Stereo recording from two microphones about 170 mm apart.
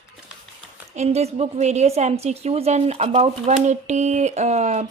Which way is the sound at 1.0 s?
40° right (ahead or behind).